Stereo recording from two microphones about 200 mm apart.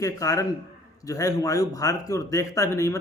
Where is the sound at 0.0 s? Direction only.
15° left (ahead or behind).